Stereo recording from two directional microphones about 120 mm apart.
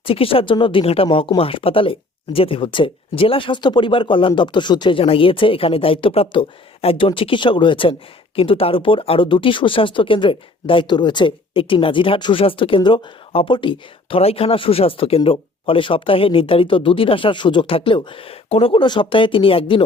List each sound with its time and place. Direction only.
0.0 s speech: 50° left (ahead or behind)